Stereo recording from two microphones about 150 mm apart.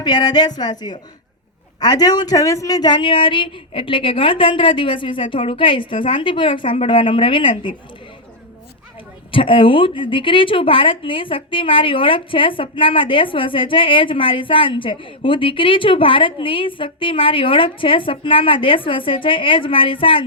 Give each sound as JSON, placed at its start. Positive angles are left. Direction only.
{"t": 0.0, "sound": "a woman's voice", "side_deg": 30}
{"t": 9.3, "sound": "a woman's voice", "side_deg": 35}